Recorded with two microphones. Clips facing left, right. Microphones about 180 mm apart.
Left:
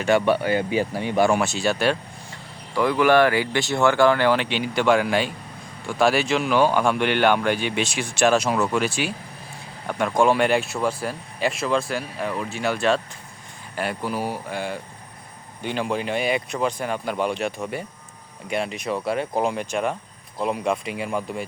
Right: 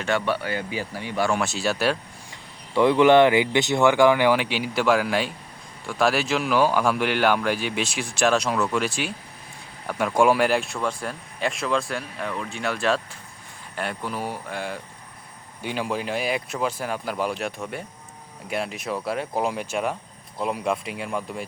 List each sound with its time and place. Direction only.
0.0 s speech: 15° left (ahead or behind)
1.4 s speech: centre (ahead or behind)
2.7 s speech: 25° right (ahead or behind); by 9.1 s centre (ahead or behind)
10.2 s speech: 5° right (ahead or behind)